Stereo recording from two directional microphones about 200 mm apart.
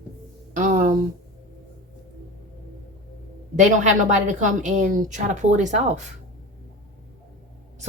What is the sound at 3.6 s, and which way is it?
A woman's voice, 40° right (ahead or behind).